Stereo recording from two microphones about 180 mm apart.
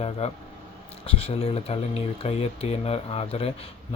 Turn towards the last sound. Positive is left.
turn(degrees=35)  # may be behind; listen again after turning